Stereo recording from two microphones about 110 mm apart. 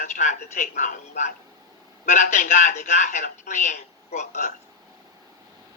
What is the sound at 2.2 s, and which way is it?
A man's voice, 90° left.